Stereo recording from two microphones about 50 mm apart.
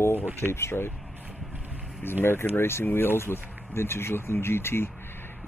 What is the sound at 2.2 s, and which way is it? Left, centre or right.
Speech, left.